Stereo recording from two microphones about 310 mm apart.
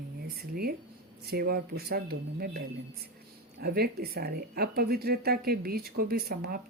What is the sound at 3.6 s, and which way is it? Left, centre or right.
Speech, right.